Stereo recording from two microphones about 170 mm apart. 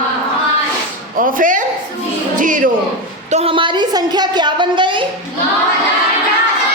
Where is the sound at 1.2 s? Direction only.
55° right (ahead or behind).